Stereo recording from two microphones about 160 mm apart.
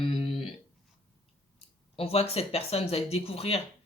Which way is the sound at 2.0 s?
40° left (ahead or behind).